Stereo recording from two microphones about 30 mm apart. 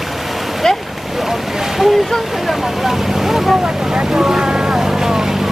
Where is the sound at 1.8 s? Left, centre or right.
Centre.